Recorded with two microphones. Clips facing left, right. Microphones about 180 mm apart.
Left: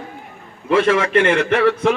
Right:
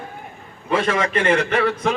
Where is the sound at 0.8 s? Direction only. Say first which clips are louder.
Left 2 dB; 65° left (ahead or behind).